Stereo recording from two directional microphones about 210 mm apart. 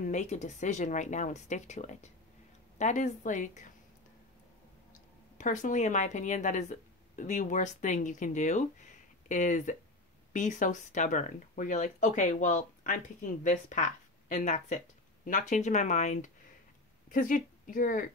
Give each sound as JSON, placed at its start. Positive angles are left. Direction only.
{"t": 0.0, "sound": "speech", "side_deg": 35}
{"t": 5.4, "sound": "a woman's voice", "side_deg": 35}